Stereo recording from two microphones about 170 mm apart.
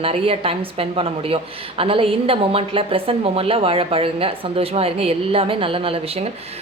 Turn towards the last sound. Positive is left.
turn(degrees=-30)  # may be behind; listen again after turning